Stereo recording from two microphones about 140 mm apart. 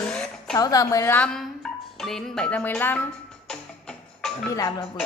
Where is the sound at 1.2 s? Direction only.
5° left (ahead or behind).